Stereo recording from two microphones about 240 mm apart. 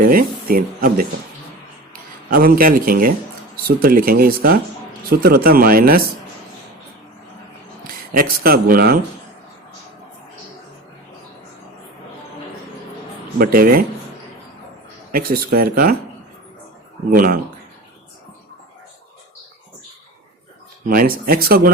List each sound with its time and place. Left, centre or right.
0.0 s speech: right
8.1 s speech: right
13.4 s speech: right
15.1 s speech: right
17.2 s speech: right
20.9 s speech: right